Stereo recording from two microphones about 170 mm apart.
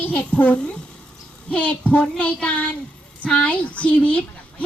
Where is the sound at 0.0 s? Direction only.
10° left (ahead or behind).